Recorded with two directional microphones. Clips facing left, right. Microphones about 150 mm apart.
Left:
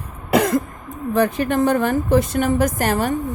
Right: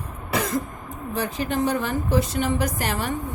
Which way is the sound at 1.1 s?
55° left (ahead or behind).